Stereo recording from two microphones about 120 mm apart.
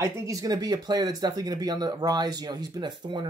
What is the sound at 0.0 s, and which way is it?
Speech, 25° right (ahead or behind).